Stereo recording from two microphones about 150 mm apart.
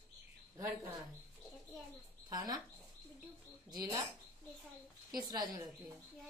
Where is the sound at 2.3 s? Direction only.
25° right (ahead or behind).